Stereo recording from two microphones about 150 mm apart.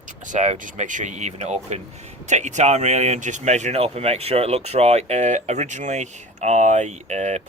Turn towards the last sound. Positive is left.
turn(degrees=-50)  # may be behind; listen again after turning